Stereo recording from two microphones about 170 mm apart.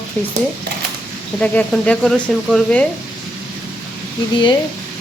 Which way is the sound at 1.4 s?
5° left (ahead or behind).